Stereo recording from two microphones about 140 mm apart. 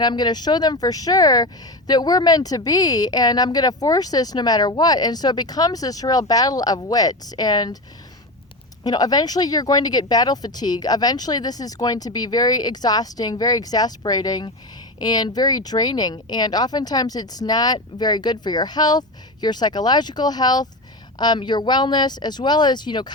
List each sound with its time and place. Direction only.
0.0 s speech: 30° left (ahead or behind)
8.8 s speech: 30° left (ahead or behind)